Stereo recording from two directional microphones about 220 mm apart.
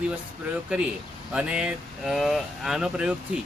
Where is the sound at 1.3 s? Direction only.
5° right (ahead or behind).